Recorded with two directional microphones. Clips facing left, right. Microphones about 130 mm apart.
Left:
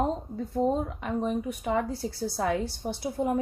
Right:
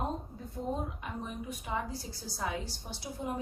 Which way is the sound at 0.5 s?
80° left.